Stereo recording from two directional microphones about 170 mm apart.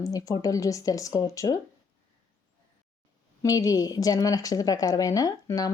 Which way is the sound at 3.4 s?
20° left (ahead or behind).